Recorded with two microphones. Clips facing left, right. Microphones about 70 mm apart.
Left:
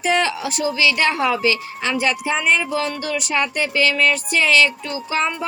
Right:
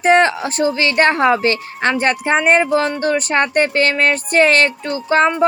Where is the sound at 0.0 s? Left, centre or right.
Right.